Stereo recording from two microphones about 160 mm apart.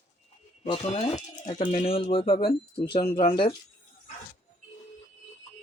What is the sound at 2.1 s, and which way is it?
Speech, 30° left (ahead or behind).